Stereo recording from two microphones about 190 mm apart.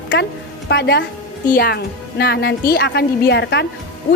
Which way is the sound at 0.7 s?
65° left (ahead or behind).